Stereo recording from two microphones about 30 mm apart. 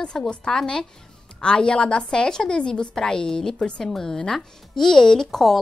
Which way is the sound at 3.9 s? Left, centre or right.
Centre.